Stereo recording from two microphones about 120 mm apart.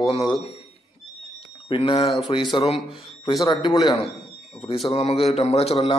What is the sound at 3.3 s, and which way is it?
Speech, 35° left (ahead or behind).